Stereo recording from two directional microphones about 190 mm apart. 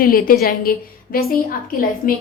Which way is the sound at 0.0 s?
50° left (ahead or behind).